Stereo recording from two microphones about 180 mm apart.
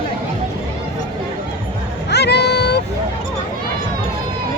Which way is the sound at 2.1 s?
65° left (ahead or behind).